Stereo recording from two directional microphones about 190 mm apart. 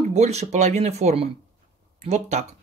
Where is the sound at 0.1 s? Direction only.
35° right (ahead or behind).